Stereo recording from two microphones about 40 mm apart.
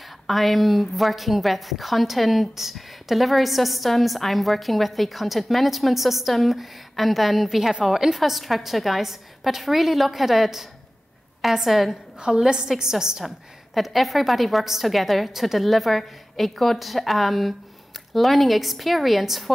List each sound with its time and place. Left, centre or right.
0.0 s a woman's voice: centre
12.2 s a woman's voice: centre
13.7 s a woman's voice: centre